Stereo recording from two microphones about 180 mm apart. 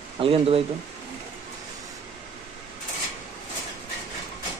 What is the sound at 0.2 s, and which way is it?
Speech, 30° right (ahead or behind).